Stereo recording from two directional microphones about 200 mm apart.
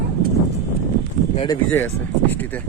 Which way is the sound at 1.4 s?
10° left (ahead or behind).